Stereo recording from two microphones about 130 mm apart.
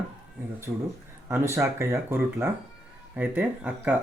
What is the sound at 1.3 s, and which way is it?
Speech, 20° right (ahead or behind).